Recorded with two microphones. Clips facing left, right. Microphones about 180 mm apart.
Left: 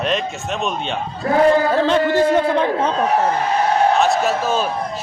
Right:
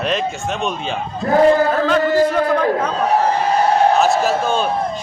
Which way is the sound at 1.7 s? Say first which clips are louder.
Even; 25° left (ahead or behind).